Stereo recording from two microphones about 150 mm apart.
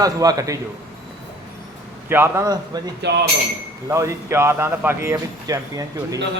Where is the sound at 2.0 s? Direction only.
15° right (ahead or behind).